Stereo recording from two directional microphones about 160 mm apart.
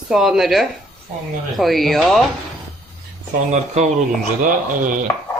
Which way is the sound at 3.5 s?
45° right (ahead or behind).